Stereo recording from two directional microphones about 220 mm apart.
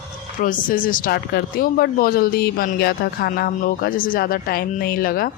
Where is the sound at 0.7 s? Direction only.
40° left (ahead or behind).